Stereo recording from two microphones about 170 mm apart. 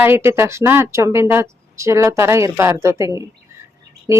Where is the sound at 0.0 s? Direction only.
15° right (ahead or behind).